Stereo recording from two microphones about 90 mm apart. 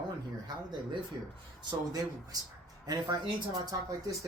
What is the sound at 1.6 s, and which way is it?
Speech, 50° right (ahead or behind).